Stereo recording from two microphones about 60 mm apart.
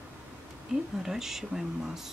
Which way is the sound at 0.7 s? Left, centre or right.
Centre.